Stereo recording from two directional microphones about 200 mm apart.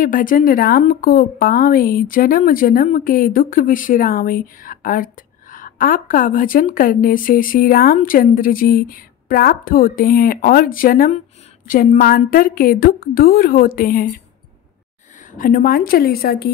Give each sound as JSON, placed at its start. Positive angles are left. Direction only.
{"t": 0.0, "sound": "a woman's voice", "side_deg": 45}
{"t": 15.3, "sound": "a woman's voice", "side_deg": 45}